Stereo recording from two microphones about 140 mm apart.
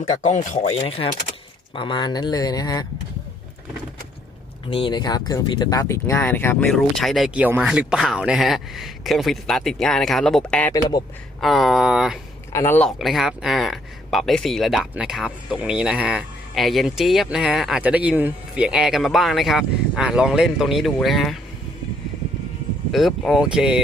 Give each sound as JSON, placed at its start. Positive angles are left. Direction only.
{"t": 0.0, "sound": "speech", "side_deg": 60}
{"t": 4.7, "sound": "speech", "side_deg": 35}
{"t": 6.7, "sound": "speech", "side_deg": 0}
{"t": 12.5, "sound": "speech", "side_deg": 15}
{"t": 13.0, "sound": "speech", "side_deg": 0}
{"t": 22.9, "sound": "speech", "side_deg": 0}